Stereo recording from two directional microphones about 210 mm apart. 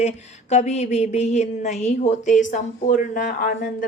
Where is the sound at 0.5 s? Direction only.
30° left (ahead or behind).